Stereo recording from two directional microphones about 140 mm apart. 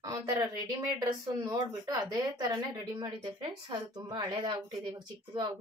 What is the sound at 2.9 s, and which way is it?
Speech, 35° right (ahead or behind).